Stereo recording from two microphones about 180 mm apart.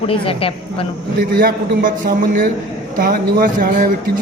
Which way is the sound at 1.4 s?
50° right (ahead or behind).